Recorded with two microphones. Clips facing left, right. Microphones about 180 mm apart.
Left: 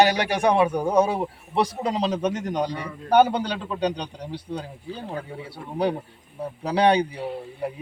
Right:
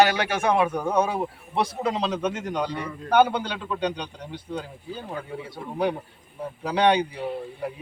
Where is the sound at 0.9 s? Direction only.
35° left (ahead or behind).